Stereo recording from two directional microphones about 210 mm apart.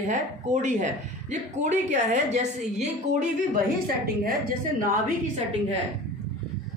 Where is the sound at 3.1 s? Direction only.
50° right (ahead or behind).